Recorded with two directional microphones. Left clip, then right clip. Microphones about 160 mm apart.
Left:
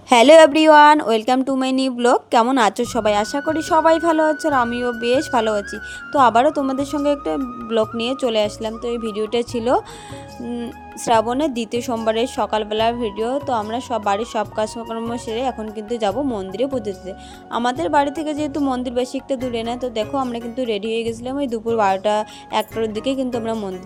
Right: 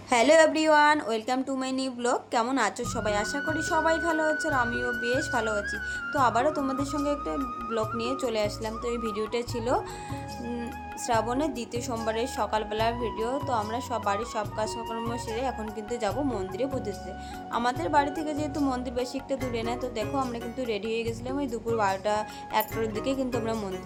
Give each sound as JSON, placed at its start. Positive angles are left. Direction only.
{"t": 0.1, "sound": "a woman's voice", "side_deg": 60}
{"t": 11.0, "sound": "a woman's voice", "side_deg": 50}